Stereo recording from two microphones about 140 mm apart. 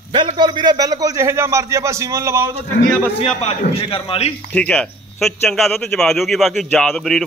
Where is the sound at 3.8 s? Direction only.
40° left (ahead or behind).